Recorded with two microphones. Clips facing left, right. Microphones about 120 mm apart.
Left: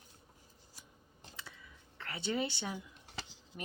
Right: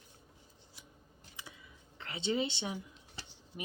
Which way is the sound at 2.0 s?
20° right (ahead or behind).